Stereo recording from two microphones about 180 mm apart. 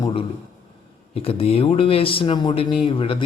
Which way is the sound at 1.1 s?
35° left (ahead or behind).